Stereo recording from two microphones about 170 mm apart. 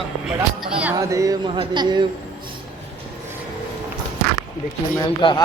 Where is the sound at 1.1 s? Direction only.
20° right (ahead or behind).